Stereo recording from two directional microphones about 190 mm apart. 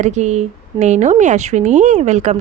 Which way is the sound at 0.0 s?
40° right (ahead or behind).